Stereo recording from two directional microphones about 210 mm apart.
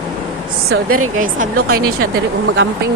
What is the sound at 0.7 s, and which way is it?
A woman's voice, 90° right.